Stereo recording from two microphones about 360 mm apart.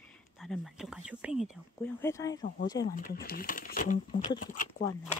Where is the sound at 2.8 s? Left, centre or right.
Centre.